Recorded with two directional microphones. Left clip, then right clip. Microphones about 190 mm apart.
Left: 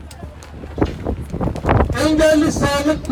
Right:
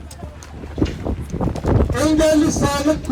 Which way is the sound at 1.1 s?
20° right (ahead or behind).